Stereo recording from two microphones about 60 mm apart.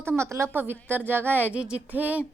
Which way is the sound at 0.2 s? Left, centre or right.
Right.